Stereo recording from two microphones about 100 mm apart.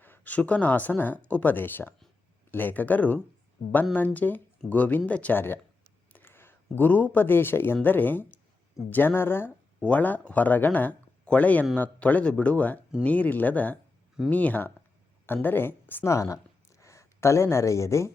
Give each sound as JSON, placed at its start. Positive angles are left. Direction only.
{"t": 0.0, "sound": "speech", "side_deg": 15}
{"t": 3.6, "sound": "a woman's voice", "side_deg": 75}
{"t": 3.9, "sound": "a woman's voice", "side_deg": 15}
{"t": 16.1, "sound": "speech", "side_deg": 30}